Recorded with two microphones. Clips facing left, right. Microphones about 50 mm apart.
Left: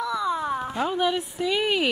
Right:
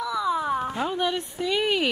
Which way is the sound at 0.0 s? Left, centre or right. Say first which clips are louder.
Even; centre.